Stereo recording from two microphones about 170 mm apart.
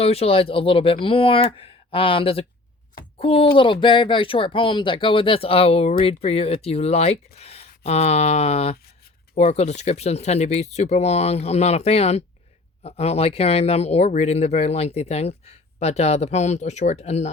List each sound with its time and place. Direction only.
0.0 s speech: 35° left (ahead or behind)